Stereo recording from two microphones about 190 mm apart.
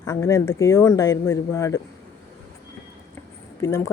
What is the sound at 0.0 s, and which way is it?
A woman's voice, 15° left (ahead or behind).